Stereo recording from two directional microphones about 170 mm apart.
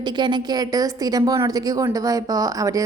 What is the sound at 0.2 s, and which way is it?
A woman's voice, 25° right (ahead or behind).